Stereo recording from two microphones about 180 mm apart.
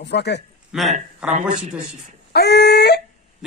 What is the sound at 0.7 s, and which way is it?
Speech, centre (ahead or behind).